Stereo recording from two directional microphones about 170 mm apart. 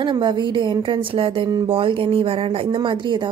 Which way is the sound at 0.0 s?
25° right (ahead or behind).